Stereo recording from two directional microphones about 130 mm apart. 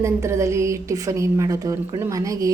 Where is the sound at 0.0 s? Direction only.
20° right (ahead or behind).